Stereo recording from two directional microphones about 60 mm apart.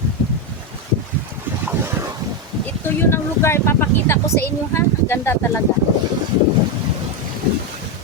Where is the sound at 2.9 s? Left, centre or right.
Left.